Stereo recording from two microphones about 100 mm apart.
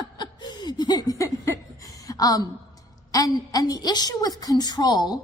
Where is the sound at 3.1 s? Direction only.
40° left (ahead or behind).